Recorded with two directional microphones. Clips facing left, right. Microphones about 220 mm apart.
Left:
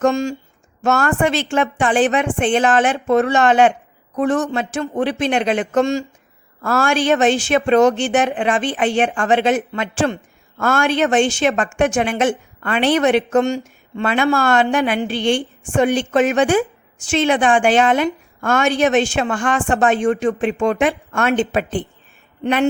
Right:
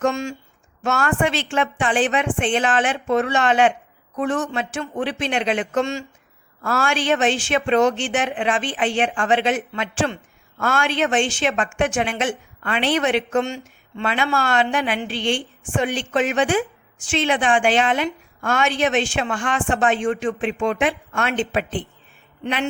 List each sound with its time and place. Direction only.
0.0 s a woman's voice: 40° left (ahead or behind)